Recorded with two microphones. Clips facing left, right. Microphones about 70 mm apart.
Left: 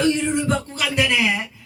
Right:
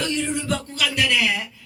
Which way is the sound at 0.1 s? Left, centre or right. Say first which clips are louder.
Left 4 dB; left.